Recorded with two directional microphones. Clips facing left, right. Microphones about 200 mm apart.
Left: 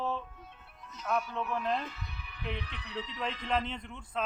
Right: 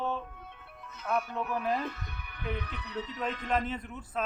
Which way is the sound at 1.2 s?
55° right (ahead or behind).